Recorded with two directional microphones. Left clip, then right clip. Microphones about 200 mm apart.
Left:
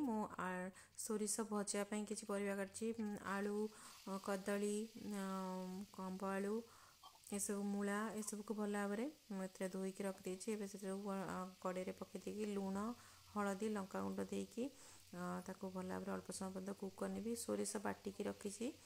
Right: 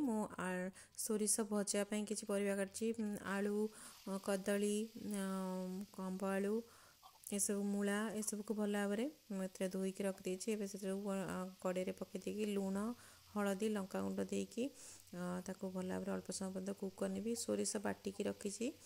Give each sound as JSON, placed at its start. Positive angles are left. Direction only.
{"t": 0.0, "sound": "speech", "side_deg": -20}